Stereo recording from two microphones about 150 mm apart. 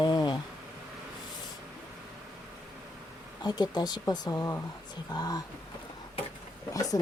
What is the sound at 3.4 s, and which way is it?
Speech, 30° left (ahead or behind).